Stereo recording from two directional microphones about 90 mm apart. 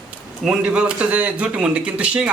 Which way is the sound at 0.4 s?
10° right (ahead or behind).